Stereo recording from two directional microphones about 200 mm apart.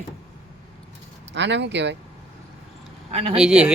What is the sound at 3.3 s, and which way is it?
Speech, 5° right (ahead or behind).